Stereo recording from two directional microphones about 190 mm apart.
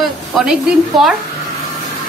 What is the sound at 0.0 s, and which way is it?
A woman's voice, centre (ahead or behind).